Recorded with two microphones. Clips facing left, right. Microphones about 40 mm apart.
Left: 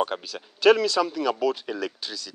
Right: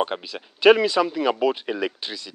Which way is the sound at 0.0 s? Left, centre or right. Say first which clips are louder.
Right 1 dB; centre.